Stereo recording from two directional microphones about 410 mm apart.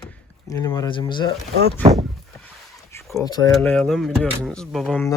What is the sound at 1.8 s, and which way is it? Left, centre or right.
Speech, centre.